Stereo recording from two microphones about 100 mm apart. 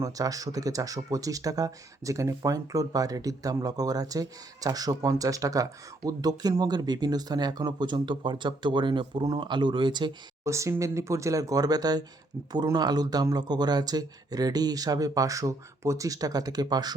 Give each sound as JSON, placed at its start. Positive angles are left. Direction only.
{"t": 0.0, "sound": "speech", "side_deg": -35}
{"t": 10.4, "sound": "speech", "side_deg": -30}